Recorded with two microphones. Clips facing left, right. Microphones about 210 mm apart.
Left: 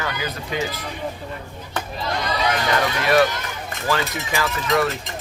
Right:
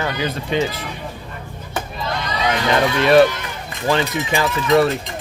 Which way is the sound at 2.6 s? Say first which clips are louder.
Right 9 dB; 25° right (ahead or behind).